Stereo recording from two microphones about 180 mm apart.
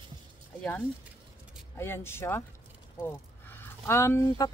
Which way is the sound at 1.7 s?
15° left (ahead or behind).